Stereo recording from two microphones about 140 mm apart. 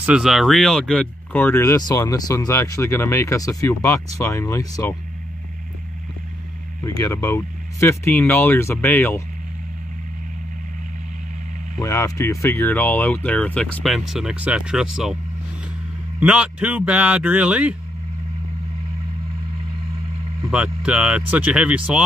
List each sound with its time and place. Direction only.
0.0 s speech: 5° right (ahead or behind); by 4.9 s 25° left (ahead or behind)
6.8 s speech: 25° left (ahead or behind)
11.8 s speech: 20° left (ahead or behind)
13.8 s speech: centre (ahead or behind)
16.2 s speech: 10° right (ahead or behind)
20.4 s speech: 5° right (ahead or behind)